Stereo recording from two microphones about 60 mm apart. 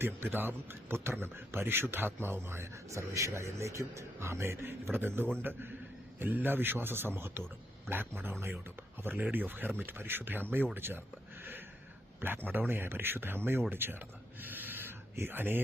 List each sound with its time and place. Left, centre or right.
0.0 s a man's voice: right
12.5 s a man's voice: right
14.4 s owl: right
15.1 s a man's voice: right